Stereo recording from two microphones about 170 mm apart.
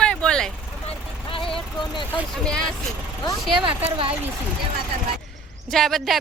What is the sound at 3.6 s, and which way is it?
Speech, 30° right (ahead or behind).